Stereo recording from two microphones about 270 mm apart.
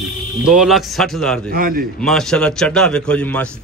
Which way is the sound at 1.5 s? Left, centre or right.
Right.